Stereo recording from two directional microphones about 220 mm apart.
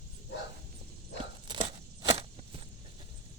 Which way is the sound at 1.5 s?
20° right (ahead or behind).